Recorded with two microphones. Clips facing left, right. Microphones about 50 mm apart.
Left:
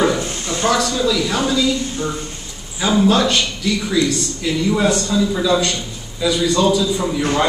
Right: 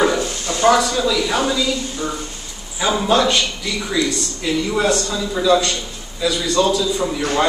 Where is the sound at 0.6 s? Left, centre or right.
Right.